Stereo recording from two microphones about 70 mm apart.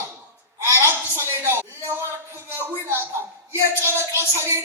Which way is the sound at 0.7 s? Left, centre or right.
Right.